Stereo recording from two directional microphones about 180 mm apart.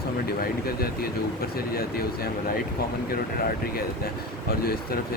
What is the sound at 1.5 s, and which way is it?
Speech, 55° left (ahead or behind).